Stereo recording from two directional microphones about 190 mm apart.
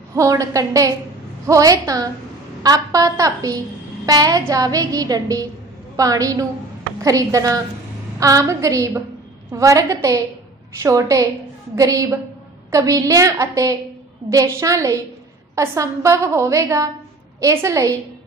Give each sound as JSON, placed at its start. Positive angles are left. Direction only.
{"t": 0.1, "sound": "a woman's voice", "side_deg": -15}